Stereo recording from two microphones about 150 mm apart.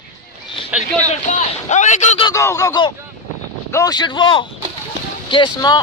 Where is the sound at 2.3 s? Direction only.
20° left (ahead or behind).